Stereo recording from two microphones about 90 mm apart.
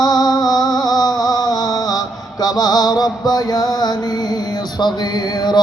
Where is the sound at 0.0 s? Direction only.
45° left (ahead or behind).